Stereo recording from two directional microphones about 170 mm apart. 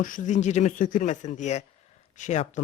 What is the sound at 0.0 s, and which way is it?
Speech, 50° left (ahead or behind).